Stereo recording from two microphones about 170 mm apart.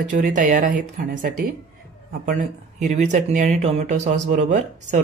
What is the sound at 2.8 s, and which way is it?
Speech, 45° right (ahead or behind).